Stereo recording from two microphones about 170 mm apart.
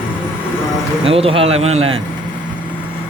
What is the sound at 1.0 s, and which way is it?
Speech, 35° right (ahead or behind).